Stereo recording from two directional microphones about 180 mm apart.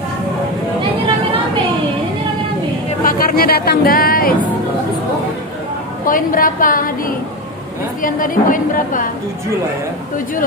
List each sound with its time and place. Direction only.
3.0 s speech: 50° left (ahead or behind)
6.0 s a woman's voice: 50° left (ahead or behind)
8.0 s a woman's voice: 50° left (ahead or behind)